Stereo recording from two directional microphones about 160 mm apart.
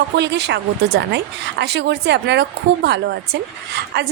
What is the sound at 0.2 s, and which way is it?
A woman's voice, 90° right.